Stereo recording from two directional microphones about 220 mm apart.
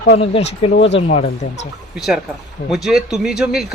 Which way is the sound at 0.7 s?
50° left (ahead or behind).